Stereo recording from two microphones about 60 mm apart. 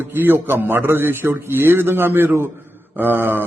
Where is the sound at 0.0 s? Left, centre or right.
Right.